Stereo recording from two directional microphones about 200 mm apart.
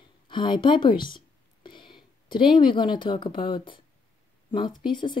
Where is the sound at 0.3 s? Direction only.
25° left (ahead or behind).